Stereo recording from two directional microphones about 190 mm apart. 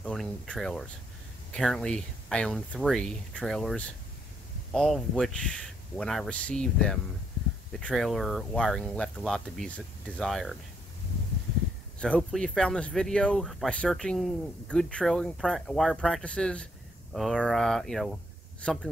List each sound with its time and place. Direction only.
0.0 s speech: 5° left (ahead or behind)
12.0 s speech: 5° left (ahead or behind)